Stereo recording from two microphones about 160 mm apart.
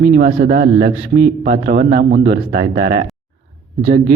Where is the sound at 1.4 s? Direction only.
55° right (ahead or behind).